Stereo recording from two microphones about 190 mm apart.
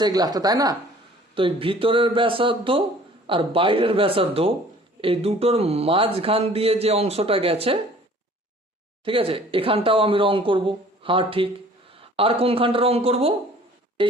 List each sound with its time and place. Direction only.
0.0 s speech: 20° right (ahead or behind)
9.0 s speech: 30° right (ahead or behind)